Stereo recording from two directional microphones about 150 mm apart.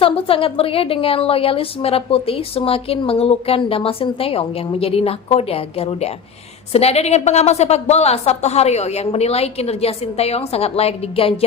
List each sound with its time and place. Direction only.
0.0 s a woman's voice: 35° left (ahead or behind)